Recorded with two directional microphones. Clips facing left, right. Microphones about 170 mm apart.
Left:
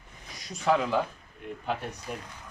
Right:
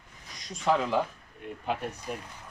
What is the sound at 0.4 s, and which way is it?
Speech, 5° left (ahead or behind).